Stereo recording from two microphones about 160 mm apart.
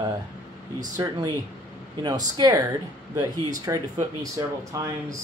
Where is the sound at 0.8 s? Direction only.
20° right (ahead or behind).